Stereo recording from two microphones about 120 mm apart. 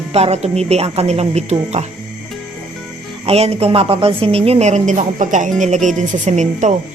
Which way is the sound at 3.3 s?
55° right (ahead or behind).